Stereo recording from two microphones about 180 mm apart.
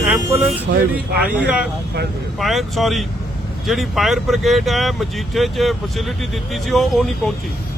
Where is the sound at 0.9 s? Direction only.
5° right (ahead or behind).